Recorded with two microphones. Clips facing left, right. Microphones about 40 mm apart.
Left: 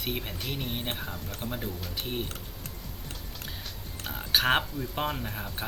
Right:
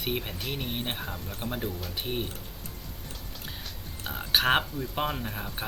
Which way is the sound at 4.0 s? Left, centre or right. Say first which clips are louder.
Right 1 dB; centre.